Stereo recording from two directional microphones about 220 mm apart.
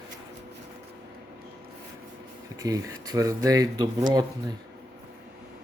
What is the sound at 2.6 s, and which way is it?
Speech, 15° right (ahead or behind).